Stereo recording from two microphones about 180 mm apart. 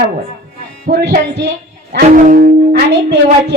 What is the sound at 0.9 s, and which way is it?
Speech, 55° right (ahead or behind).